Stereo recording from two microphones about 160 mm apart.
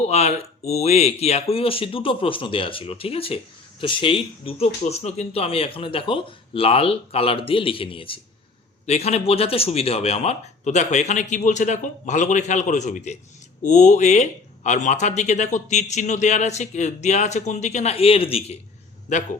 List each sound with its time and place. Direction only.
0.0 s speech: 40° left (ahead or behind)